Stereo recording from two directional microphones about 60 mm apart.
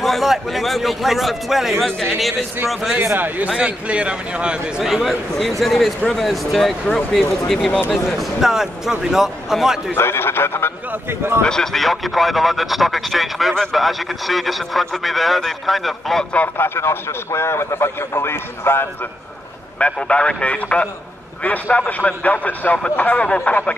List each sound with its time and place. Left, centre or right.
0.0 s speech: centre
3.4 s a man's voice: centre
4.8 s a man's voice: centre
9.9 s a man's voice: left
10.9 s speech: right
11.4 s speech: centre
16.5 s a man's voice: left
19.8 s a man's voice: centre